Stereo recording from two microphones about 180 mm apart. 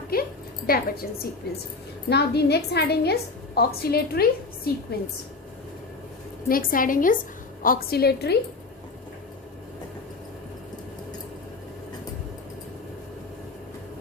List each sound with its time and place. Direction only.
0.1 s a woman's voice: 55° left (ahead or behind)
6.5 s a woman's voice: 50° left (ahead or behind)